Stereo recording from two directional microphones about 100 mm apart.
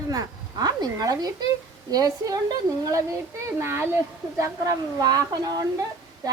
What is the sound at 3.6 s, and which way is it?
A woman's voice, 25° right (ahead or behind).